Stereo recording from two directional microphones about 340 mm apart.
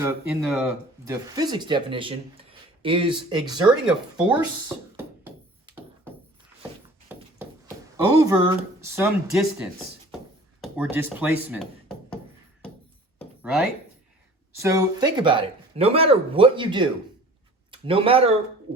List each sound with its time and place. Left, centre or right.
0.0 s speech: centre
3.8 s speech: centre
4.9 s a sound: centre
7.9 s speech: centre
13.1 s a sound: centre
14.6 s speech: centre